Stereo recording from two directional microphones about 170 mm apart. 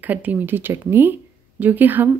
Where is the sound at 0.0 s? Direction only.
10° right (ahead or behind).